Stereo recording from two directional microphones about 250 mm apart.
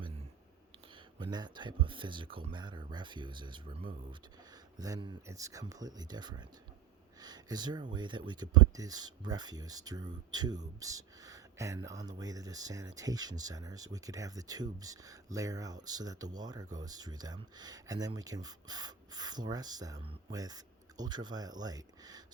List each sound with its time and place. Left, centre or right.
1.2 s speech: centre